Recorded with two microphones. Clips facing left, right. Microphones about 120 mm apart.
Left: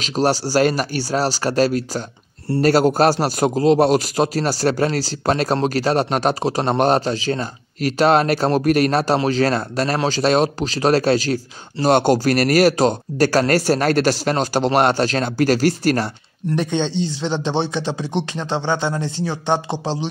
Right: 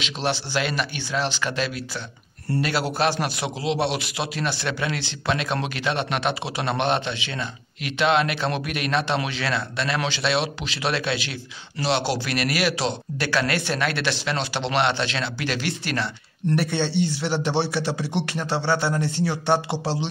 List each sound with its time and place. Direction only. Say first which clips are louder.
0.0 s a man's voice: left 8 dB; 40° left (ahead or behind)
16.5 s speech: left 3 dB; 20° left (ahead or behind)